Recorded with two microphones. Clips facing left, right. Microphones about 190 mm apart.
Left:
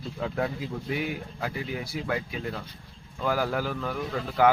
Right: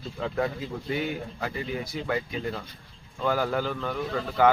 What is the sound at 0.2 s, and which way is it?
A man's voice, 5° left (ahead or behind).